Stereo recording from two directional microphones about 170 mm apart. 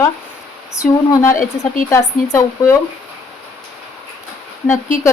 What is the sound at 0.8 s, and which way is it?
A woman's voice, 15° left (ahead or behind).